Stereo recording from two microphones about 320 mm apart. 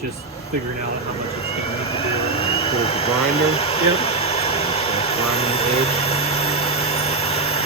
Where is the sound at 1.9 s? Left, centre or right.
Centre.